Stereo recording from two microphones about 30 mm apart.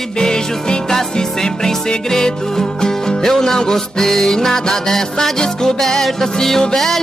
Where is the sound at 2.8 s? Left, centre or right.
Centre.